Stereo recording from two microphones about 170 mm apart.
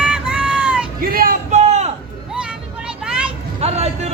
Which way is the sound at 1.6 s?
40° right (ahead or behind).